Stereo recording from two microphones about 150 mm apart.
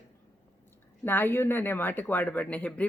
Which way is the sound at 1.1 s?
15° left (ahead or behind).